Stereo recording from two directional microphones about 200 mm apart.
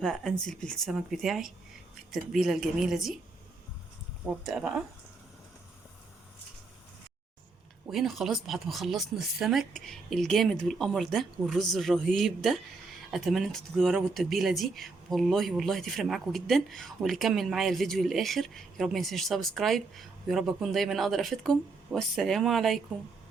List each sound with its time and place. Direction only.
0.0 s speech: 5° left (ahead or behind)
4.4 s speech: centre (ahead or behind)
7.9 s speech: centre (ahead or behind)